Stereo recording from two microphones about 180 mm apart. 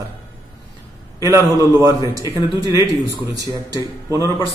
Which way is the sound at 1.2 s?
15° right (ahead or behind).